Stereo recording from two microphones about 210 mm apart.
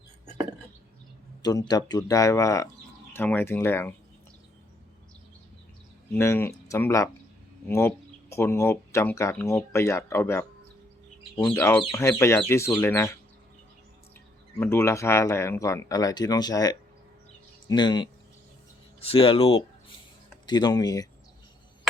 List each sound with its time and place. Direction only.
1.4 s speech: 20° left (ahead or behind)
6.1 s speech: 10° left (ahead or behind)
11.4 s speech: 5° left (ahead or behind)
14.6 s speech: 10° left (ahead or behind)